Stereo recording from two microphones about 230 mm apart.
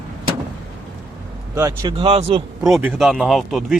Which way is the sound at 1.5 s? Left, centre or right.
Centre.